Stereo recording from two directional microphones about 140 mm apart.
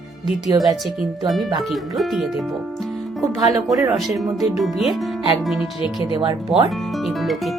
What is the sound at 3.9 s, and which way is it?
Speech, centre (ahead or behind).